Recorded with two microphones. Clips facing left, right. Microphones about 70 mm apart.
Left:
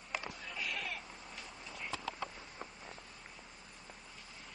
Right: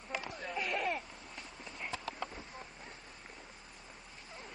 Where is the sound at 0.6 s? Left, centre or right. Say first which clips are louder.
Right 7 dB; right.